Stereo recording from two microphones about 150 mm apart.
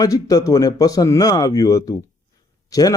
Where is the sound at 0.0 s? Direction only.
25° left (ahead or behind).